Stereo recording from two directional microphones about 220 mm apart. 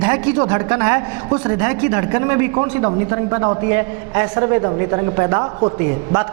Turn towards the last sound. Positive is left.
turn(degrees=-20)  # may be behind; listen again after turning